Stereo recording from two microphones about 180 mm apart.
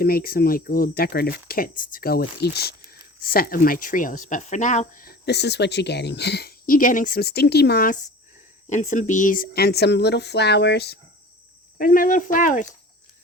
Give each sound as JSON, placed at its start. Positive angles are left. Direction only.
{"t": 0.0, "sound": "speech", "side_deg": 55}
{"t": 8.7, "sound": "speech", "side_deg": 40}
{"t": 11.8, "sound": "speech", "side_deg": 50}